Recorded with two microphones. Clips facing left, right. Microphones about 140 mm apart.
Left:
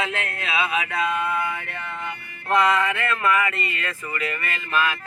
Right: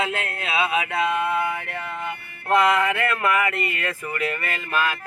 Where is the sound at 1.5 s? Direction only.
45° right (ahead or behind).